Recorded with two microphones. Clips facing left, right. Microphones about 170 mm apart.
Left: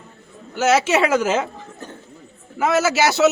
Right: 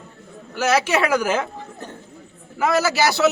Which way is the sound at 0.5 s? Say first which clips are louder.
Left 2 dB; 20° left (ahead or behind).